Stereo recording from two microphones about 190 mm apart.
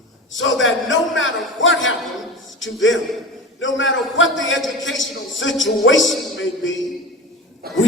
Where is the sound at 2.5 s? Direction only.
80° left.